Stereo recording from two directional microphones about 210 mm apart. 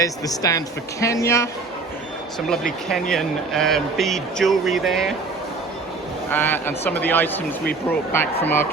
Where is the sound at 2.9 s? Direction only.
Centre (ahead or behind).